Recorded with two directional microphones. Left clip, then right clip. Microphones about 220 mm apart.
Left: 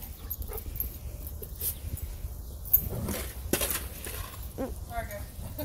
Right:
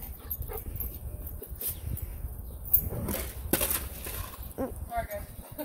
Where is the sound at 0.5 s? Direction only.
15° right (ahead or behind).